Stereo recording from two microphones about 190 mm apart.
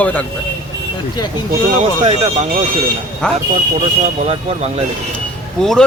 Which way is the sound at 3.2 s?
5° left (ahead or behind).